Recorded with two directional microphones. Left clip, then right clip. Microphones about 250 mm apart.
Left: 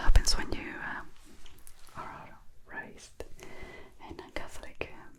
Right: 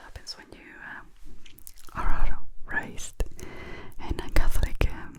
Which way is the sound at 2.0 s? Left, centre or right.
Right.